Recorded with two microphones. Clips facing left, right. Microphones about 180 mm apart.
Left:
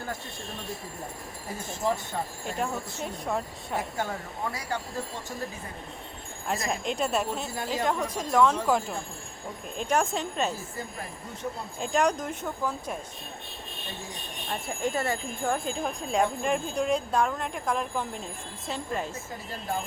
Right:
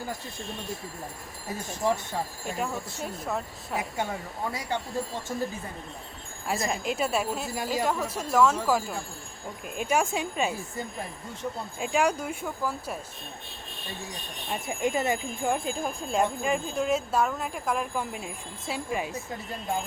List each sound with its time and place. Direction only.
0.1 s speech: centre (ahead or behind)
11.8 s speech: 5° right (ahead or behind)
14.8 s speech: 20° right (ahead or behind)
15.4 s speech: centre (ahead or behind)